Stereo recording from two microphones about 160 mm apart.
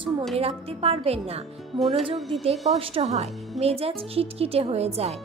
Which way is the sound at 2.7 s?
40° right (ahead or behind).